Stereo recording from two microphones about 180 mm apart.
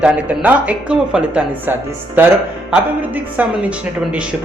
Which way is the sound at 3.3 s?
10° right (ahead or behind).